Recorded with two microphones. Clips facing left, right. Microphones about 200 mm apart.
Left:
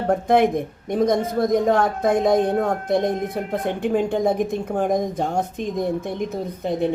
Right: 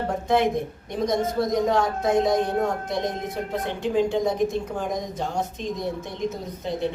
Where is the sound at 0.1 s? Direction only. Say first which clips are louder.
Left 6 dB; 55° left (ahead or behind).